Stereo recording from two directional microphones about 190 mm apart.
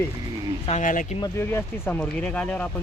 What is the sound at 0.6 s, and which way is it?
Speech, 40° left (ahead or behind).